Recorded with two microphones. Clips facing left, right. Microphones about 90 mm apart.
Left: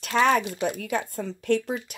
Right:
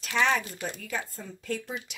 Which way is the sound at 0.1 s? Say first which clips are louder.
Left 5 dB; 45° left (ahead or behind).